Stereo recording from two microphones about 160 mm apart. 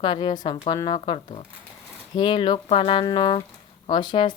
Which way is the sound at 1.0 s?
40° left (ahead or behind).